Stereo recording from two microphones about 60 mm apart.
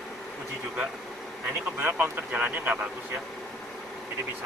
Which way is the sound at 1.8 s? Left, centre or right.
Right.